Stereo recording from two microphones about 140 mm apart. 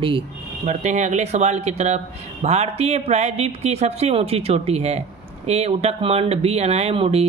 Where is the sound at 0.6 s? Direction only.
55° right (ahead or behind).